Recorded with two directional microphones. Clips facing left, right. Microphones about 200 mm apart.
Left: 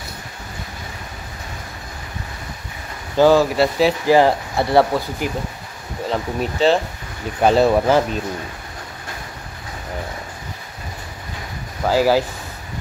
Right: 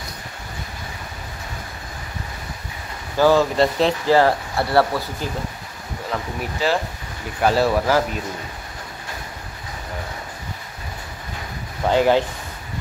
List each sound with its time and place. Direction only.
3.2 s speech: 15° left (ahead or behind)
4.2 s speech: 20° left (ahead or behind)
11.9 s speech: 5° left (ahead or behind)